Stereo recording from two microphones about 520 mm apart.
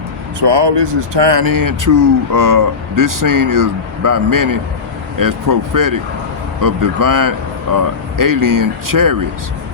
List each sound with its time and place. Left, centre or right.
0.3 s speech: right